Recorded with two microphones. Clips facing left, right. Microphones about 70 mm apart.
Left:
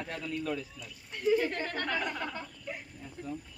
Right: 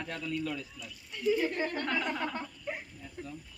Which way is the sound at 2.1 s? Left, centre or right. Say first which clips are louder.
Right 2 dB; centre.